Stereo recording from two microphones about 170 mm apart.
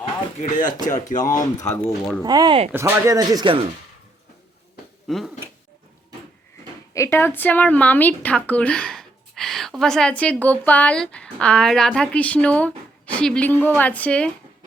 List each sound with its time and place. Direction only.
0.3 s speech: 45° left (ahead or behind)
1.6 s speech: 5° left (ahead or behind)
2.2 s speech: 25° right (ahead or behind)
5.0 s speech: centre (ahead or behind)
6.9 s a woman's voice: 15° left (ahead or behind)